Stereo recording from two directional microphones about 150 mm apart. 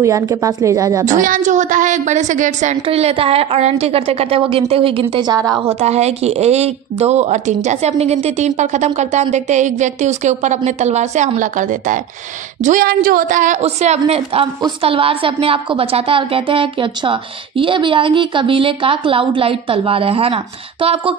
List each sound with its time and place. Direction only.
0.0 s a woman's voice: 20° right (ahead or behind)
1.0 s a woman's voice: 60° right (ahead or behind); by 5.0 s 35° right (ahead or behind)
5.1 s a woman's voice: 25° right (ahead or behind)
5.7 s a woman's voice: 45° right (ahead or behind)